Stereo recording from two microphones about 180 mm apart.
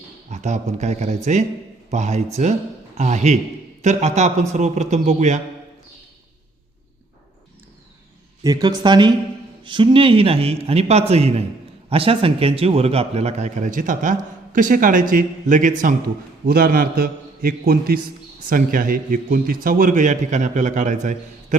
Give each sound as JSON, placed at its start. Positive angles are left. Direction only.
{"t": 0.3, "sound": "a man's voice", "side_deg": -40}
{"t": 8.4, "sound": "a man's voice", "side_deg": -25}